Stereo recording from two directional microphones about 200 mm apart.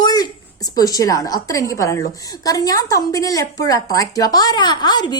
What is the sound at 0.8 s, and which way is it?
A woman's voice, 15° left (ahead or behind).